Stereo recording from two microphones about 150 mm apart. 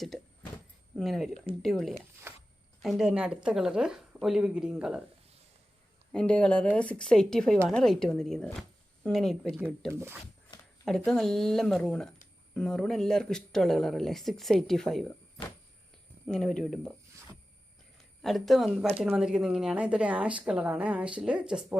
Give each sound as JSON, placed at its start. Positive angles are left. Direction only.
{"t": 0.9, "sound": "speech", "side_deg": 0}
{"t": 2.3, "sound": "zipper", "side_deg": -15}
{"t": 2.8, "sound": "speech", "side_deg": 0}
{"t": 6.1, "sound": "speech", "side_deg": 5}
{"t": 9.9, "sound": "a woman's voice", "side_deg": -15}
{"t": 10.8, "sound": "speech", "side_deg": 5}
{"t": 16.2, "sound": "speech", "side_deg": 5}
{"t": 18.2, "sound": "a woman's voice", "side_deg": 0}